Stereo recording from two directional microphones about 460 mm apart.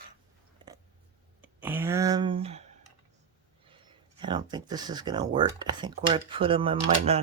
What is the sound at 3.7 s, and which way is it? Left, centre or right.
Speech, centre.